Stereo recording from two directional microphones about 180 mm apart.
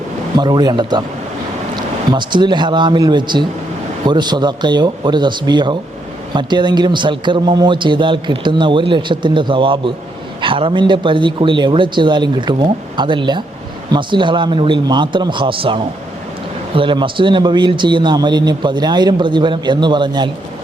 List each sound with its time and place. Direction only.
0.3 s speech: 25° right (ahead or behind)
2.0 s speech: 25° right (ahead or behind)